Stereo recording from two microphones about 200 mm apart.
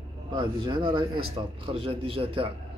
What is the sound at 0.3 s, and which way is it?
Speech, 20° right (ahead or behind).